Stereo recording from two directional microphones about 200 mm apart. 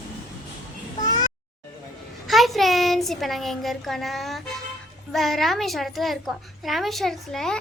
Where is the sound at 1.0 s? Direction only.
20° left (ahead or behind).